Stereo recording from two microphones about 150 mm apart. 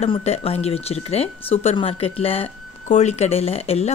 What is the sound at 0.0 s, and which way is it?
Speech, 45° left (ahead or behind).